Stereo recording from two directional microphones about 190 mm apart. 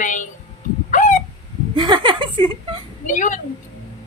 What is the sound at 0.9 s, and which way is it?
Chicken, 40° left (ahead or behind).